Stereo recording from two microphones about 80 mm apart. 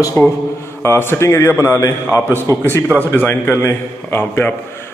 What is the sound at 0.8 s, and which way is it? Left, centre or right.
A man's voice, left.